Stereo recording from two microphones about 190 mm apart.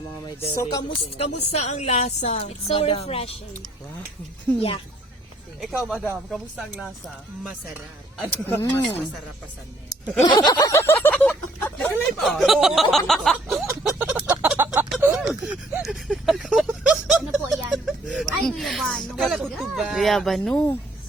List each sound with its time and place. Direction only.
0.6 s speech: 20° left (ahead or behind)
1.3 s speech: 35° left (ahead or behind)
5.5 s speech: 5° right (ahead or behind)
8.2 s speech: 5° left (ahead or behind)
10.2 s a sound: 25° left (ahead or behind); by 20.7 s 5° left (ahead or behind)